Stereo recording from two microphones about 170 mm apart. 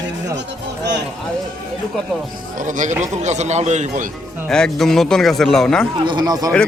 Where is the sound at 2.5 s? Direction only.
50° right (ahead or behind).